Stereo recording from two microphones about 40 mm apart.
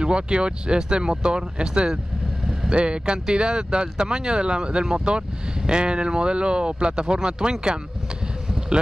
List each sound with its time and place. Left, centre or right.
0.0 s speech: right